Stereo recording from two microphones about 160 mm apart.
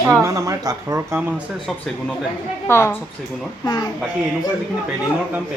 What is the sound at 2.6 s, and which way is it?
Speech, 15° left (ahead or behind).